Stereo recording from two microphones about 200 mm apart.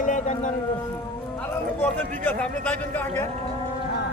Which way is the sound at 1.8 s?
10° left (ahead or behind).